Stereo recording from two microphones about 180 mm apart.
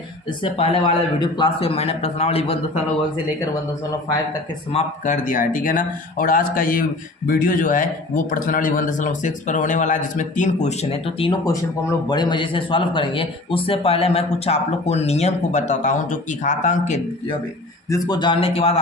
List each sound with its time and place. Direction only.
0.4 s a man's voice: 30° left (ahead or behind)
4.7 s a man's voice: 45° left (ahead or behind)
17.8 s a man's voice: 20° left (ahead or behind)